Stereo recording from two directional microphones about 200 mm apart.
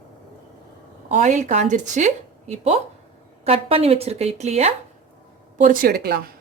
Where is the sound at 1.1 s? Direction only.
40° right (ahead or behind).